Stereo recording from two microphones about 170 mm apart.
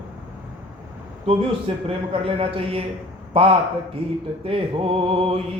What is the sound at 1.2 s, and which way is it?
A man's voice, 35° right (ahead or behind).